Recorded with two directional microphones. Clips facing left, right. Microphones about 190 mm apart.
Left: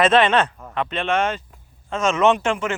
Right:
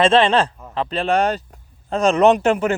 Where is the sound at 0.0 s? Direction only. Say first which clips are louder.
Right 2 dB; 30° right (ahead or behind).